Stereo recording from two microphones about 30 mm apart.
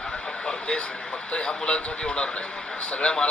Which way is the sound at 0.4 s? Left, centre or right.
Left.